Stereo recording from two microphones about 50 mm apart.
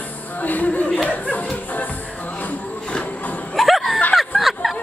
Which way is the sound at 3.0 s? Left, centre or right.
Left.